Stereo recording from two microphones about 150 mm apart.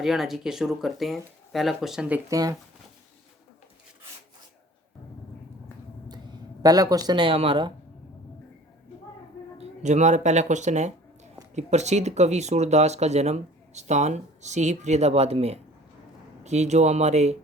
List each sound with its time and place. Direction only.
0.0 s speech: centre (ahead or behind)
2.3 s speech: 25° right (ahead or behind)
6.6 s speech: 25° right (ahead or behind)
9.6 s speech: 50° right (ahead or behind)